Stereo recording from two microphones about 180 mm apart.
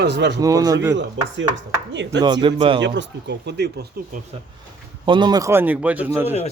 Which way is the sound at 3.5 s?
65° right (ahead or behind).